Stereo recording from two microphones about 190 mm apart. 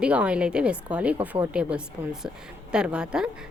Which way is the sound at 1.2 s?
25° right (ahead or behind).